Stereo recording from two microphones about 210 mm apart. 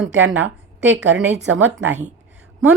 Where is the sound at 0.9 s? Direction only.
60° right (ahead or behind).